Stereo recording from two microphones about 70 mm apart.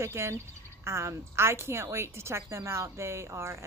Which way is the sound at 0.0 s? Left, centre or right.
Right.